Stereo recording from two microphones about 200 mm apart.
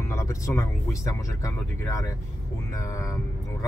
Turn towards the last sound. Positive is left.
turn(degrees=15)  # may be behind; listen again after turning